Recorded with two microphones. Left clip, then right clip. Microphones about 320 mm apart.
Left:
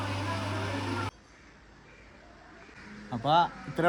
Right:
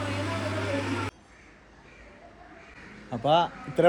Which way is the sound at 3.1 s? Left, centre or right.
Centre.